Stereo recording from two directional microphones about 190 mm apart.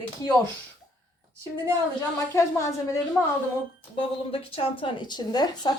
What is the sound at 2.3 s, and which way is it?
Speech, 15° left (ahead or behind).